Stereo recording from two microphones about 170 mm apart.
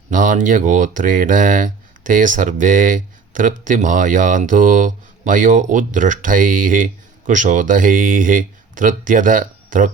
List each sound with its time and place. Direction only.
0.1 s speech: 50° right (ahead or behind)